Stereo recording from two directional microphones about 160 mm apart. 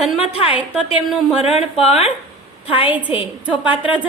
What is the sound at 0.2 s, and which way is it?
Speech, 40° left (ahead or behind).